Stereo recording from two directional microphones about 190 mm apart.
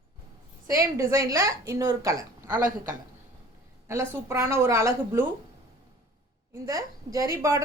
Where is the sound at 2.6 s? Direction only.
45° right (ahead or behind).